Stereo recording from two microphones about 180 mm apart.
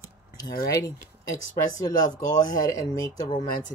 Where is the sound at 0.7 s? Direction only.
20° left (ahead or behind).